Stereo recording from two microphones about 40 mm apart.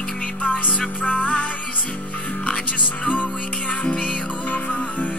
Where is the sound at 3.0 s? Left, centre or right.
Left.